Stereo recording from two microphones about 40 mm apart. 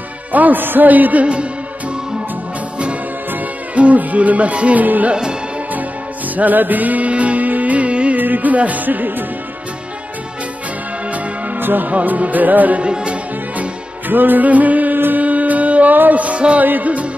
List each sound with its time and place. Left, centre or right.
0.3 s a man's voice: right
1.2 s music: right
3.7 s music: right
4.8 s a man's voice: right
6.3 s music: right
8.2 s music: right
11.6 s music: right
11.9 s a man's voice: right
12.8 s speech: right
13.6 s music: right
15.0 s music: right
15.2 s music: right
16.6 s a man's voice: right